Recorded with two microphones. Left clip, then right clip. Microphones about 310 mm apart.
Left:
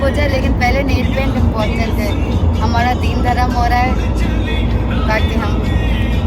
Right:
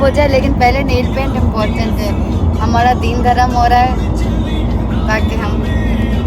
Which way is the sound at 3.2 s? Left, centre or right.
Centre.